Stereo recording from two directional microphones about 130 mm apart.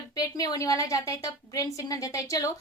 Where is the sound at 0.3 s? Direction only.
25° left (ahead or behind).